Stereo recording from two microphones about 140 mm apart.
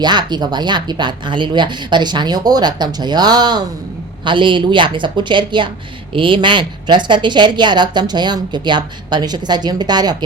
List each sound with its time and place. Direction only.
0.0 s a woman's voice: 30° right (ahead or behind)